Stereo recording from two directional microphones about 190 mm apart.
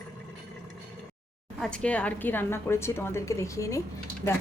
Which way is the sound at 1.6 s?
5° left (ahead or behind).